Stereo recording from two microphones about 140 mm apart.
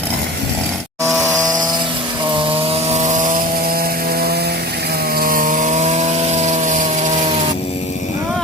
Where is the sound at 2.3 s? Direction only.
35° right (ahead or behind); by 7.1 s 65° right (ahead or behind).